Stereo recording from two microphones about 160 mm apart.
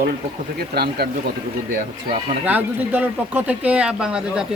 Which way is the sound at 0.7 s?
90° right.